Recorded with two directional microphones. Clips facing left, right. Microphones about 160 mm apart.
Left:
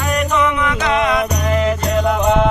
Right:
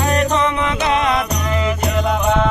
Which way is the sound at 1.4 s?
35° left (ahead or behind).